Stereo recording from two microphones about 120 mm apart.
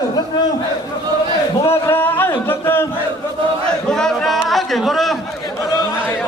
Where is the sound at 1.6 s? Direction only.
20° left (ahead or behind).